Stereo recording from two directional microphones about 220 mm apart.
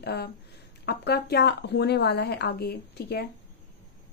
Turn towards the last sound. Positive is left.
turn(degrees=45)  # may be behind; listen again after turning